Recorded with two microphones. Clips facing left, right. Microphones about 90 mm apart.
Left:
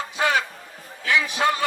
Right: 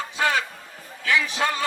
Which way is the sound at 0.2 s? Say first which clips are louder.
Left 1 dB; 20° left (ahead or behind).